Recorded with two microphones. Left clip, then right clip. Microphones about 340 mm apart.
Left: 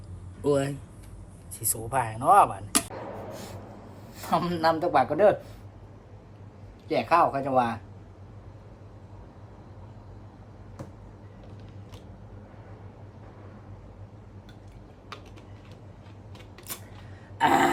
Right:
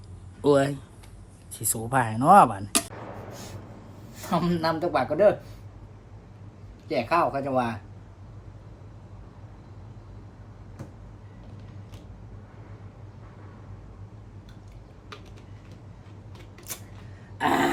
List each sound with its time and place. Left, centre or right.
0.4 s speech: right
4.1 s a man's voice: centre
6.8 s a man's voice: centre
17.3 s a sound: centre